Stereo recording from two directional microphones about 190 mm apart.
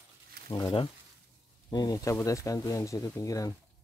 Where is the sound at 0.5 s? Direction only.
25° left (ahead or behind).